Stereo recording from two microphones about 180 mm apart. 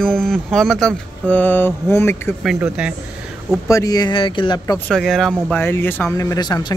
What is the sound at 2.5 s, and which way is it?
Speech, 5° right (ahead or behind).